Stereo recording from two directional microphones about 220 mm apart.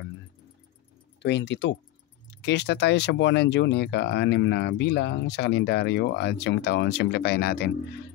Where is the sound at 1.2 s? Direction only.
50° left (ahead or behind).